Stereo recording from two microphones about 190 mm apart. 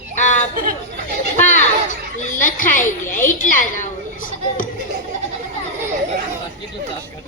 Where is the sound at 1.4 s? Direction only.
40° left (ahead or behind).